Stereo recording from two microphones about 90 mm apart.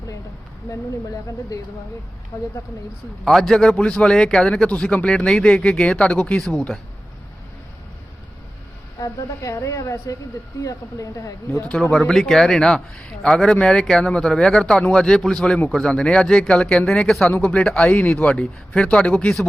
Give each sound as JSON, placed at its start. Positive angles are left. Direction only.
{"t": 3.2, "sound": "speech", "side_deg": 5}
{"t": 9.0, "sound": "a woman's voice", "side_deg": 35}
{"t": 11.6, "sound": "speech", "side_deg": 15}